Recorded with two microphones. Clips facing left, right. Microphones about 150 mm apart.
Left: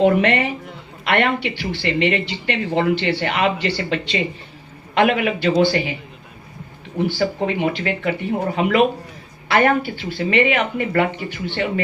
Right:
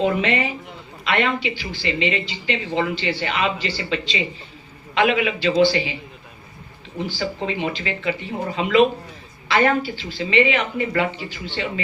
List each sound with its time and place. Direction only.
0.0 s a man's voice: 60° left (ahead or behind)
7.0 s speech: 55° left (ahead or behind)